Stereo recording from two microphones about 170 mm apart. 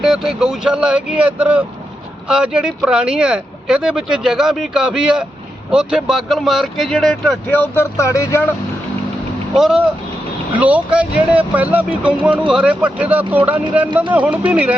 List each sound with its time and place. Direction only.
0.0 s speech: centre (ahead or behind); by 8.4 s 15° left (ahead or behind)
9.6 s speech: centre (ahead or behind)